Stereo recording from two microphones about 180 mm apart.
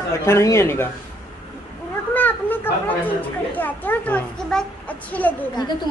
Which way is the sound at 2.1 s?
10° left (ahead or behind).